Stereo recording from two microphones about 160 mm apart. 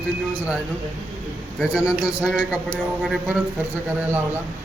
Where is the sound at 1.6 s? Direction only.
5° right (ahead or behind).